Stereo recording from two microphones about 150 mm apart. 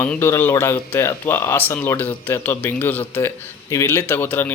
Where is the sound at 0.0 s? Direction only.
15° left (ahead or behind).